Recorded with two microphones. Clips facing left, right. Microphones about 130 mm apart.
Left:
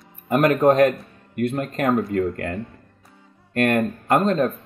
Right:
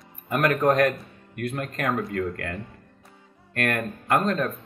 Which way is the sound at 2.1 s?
30° left (ahead or behind).